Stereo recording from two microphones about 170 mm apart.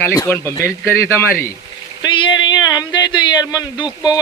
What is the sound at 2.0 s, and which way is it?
Speech, 25° left (ahead or behind).